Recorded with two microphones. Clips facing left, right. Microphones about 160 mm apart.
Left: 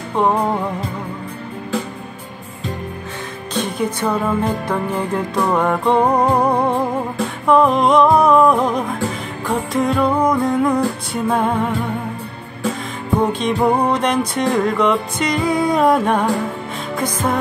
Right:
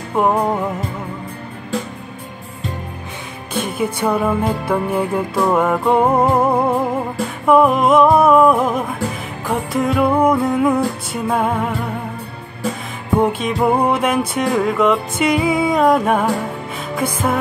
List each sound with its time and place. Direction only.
0.1 s music: 5° right (ahead or behind)
3.5 s music: 10° right (ahead or behind)
13.2 s music: 5° right (ahead or behind)